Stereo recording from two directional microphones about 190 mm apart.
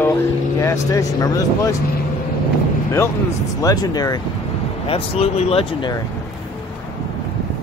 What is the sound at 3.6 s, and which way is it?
Speech, 20° left (ahead or behind).